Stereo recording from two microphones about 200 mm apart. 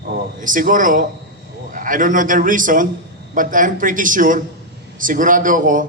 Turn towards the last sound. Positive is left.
turn(degrees=-40)  # may be behind; listen again after turning